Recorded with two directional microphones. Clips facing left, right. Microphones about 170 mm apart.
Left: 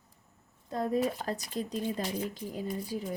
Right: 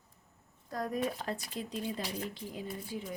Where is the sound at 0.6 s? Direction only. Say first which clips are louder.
Left 5 dB; 25° left (ahead or behind).